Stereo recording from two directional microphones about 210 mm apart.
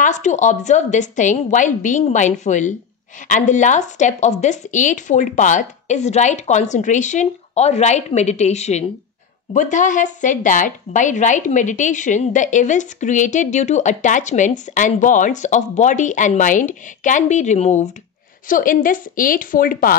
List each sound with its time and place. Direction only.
0.0 s speech: 35° left (ahead or behind)